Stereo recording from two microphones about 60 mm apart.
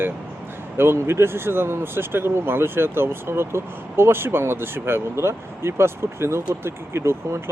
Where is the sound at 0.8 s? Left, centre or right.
Right.